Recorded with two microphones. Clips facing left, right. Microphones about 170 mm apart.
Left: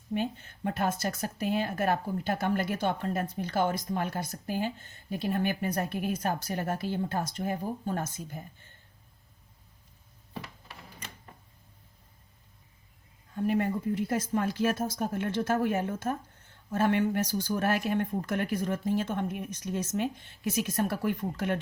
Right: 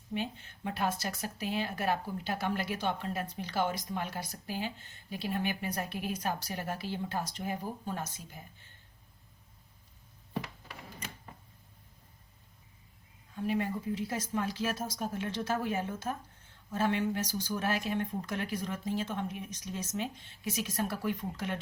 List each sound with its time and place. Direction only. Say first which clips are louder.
0.1 s a woman's voice: left 5 dB; 45° left (ahead or behind)
13.3 s a woman's voice: left 4 dB; 50° left (ahead or behind)